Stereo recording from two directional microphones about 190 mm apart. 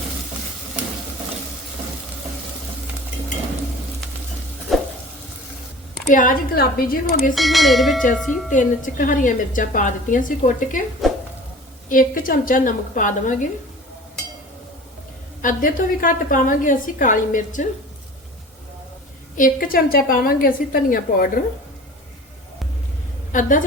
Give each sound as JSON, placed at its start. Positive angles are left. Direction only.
{"t": 4.7, "sound": "a sound", "side_deg": 0}
{"t": 6.1, "sound": "a woman's voice", "side_deg": 45}
{"t": 7.3, "sound": "speech", "side_deg": 0}
{"t": 8.5, "sound": "a woman's voice", "side_deg": 45}
{"t": 11.9, "sound": "a woman's voice", "side_deg": 45}
{"t": 15.4, "sound": "a woman's voice", "side_deg": 45}
{"t": 19.4, "sound": "a woman's voice", "side_deg": 50}
{"t": 23.3, "sound": "a woman's voice", "side_deg": 45}